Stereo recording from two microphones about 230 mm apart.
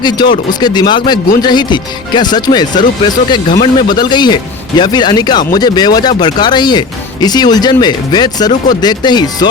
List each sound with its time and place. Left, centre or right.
0.0 s speech: centre